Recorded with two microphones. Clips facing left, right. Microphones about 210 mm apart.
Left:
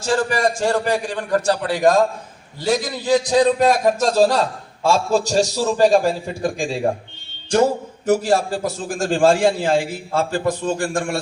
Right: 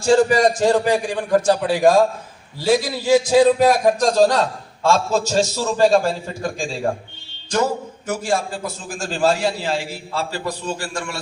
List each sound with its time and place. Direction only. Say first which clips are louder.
0.1 s a man's voice: right 5 dB; 25° right (ahead or behind); by 6.9 s 15° left (ahead or behind)
7.5 s a man's voice: left 4 dB; 35° left (ahead or behind); by 11.2 s 50° left (ahead or behind)